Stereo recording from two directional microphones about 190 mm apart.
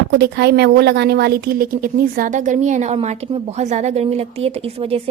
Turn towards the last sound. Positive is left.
turn(degrees=-30)  # may be behind; listen again after turning